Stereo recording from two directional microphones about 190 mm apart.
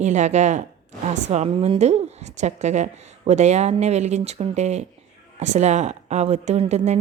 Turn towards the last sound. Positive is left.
turn(degrees=-35)  # may be behind; listen again after turning